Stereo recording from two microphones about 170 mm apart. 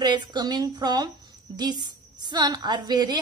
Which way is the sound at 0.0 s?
25° right (ahead or behind).